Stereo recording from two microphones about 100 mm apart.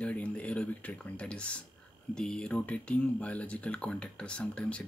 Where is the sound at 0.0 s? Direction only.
15° left (ahead or behind).